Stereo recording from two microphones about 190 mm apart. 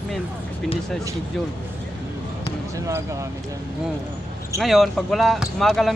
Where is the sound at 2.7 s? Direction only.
15° right (ahead or behind).